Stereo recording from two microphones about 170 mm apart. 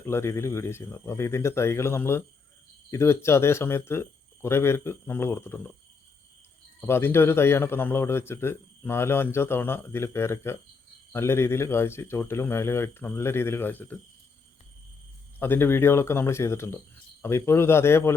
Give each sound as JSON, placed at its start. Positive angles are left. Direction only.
{"t": 0.0, "sound": "a man's voice", "side_deg": 15}
{"t": 6.8, "sound": "a man's voice", "side_deg": 15}
{"t": 15.4, "sound": "a man's voice", "side_deg": 15}